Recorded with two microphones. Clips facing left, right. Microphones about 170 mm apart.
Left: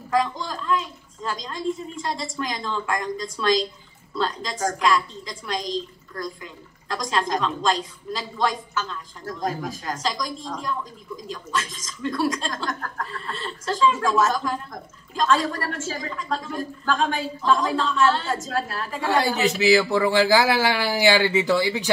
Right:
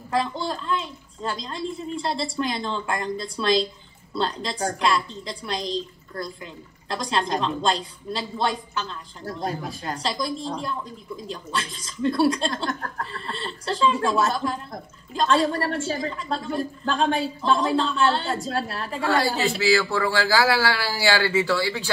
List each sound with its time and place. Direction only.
0.1 s speech: 35° right (ahead or behind)
6.9 s speech: 35° right (ahead or behind)
19.0 s speech: 20° left (ahead or behind)